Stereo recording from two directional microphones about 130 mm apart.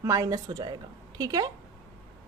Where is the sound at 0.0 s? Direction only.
25° right (ahead or behind).